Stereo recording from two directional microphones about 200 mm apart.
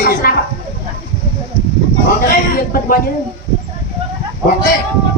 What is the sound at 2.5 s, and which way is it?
Speech, 45° left (ahead or behind).